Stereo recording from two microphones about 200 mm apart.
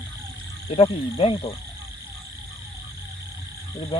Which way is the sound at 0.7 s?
30° left (ahead or behind).